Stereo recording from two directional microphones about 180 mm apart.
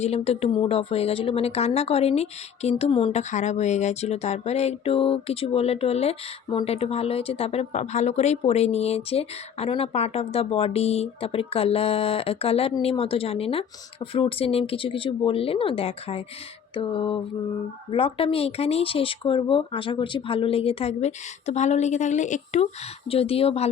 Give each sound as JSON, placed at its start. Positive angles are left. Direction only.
{"t": 0.0, "sound": "speech", "side_deg": 35}
{"t": 16.7, "sound": "a sound", "side_deg": 30}
{"t": 17.9, "sound": "speech", "side_deg": 30}
{"t": 23.0, "sound": "speech", "side_deg": 30}